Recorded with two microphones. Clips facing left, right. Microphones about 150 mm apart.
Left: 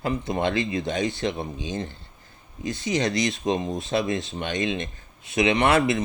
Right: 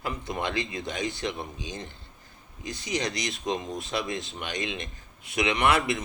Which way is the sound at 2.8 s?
25° left (ahead or behind).